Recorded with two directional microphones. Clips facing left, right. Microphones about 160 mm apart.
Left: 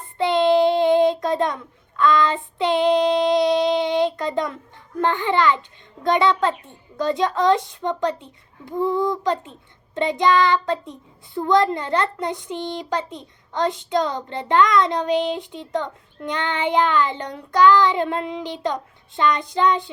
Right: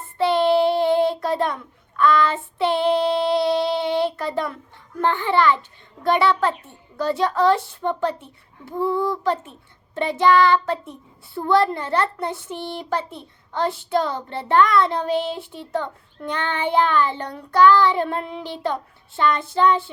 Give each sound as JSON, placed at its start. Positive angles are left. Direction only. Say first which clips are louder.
{"t": 0.2, "sound": "child singing", "louder": "left 1 dB", "side_deg": 20}
{"t": 4.9, "sound": "a child's voice", "louder": "even", "side_deg": 20}